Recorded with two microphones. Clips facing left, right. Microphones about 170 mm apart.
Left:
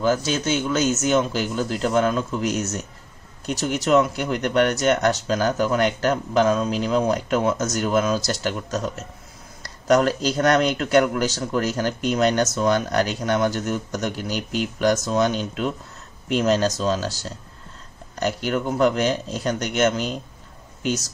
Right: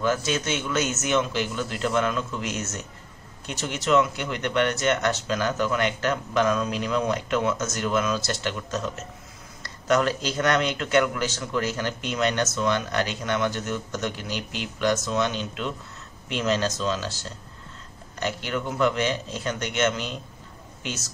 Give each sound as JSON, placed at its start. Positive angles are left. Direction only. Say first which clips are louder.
{"t": 0.0, "sound": "speech", "louder": "left 4 dB", "side_deg": 30}